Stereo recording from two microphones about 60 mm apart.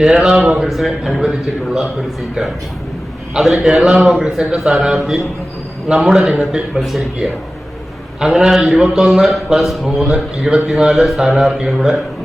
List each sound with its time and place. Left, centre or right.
0.0 s a man's voice: centre
0.6 s a man's voice: centre
9.1 s a man's voice: centre